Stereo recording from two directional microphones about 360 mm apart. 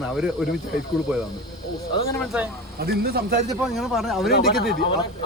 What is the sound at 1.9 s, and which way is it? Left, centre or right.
Speech, centre.